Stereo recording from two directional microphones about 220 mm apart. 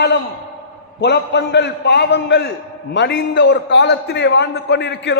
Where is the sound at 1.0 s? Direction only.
50° left (ahead or behind).